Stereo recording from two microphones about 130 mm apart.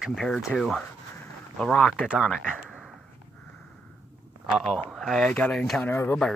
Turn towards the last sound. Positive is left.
turn(degrees=20)  # may be behind; listen again after turning